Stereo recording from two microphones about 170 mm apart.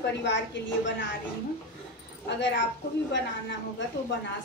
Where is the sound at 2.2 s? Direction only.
90° left.